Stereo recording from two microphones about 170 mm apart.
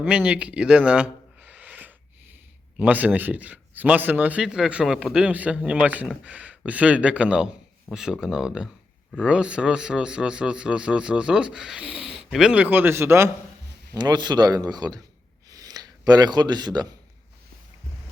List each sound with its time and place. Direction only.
0.0 s a man's voice: 5° right (ahead or behind)
13.9 s speech: 25° right (ahead or behind)
15.4 s a sound: 20° right (ahead or behind)